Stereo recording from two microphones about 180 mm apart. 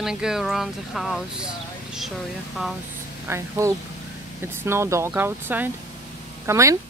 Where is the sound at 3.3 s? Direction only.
15° right (ahead or behind).